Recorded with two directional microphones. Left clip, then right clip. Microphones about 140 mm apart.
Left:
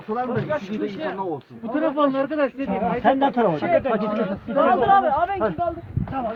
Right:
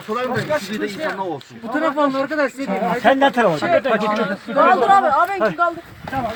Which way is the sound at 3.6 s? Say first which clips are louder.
Right 3 dB; 15° right (ahead or behind).